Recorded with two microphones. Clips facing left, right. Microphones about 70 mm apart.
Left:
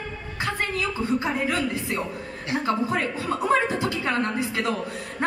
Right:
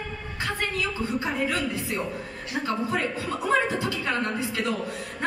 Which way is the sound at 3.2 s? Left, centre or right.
Left.